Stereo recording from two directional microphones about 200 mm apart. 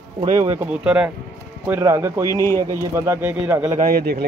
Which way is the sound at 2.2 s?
15° left (ahead or behind).